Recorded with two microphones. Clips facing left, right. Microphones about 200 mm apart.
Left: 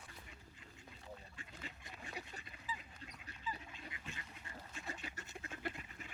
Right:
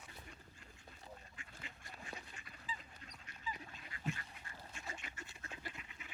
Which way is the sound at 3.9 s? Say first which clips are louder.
Right 6 dB; 20° left (ahead or behind).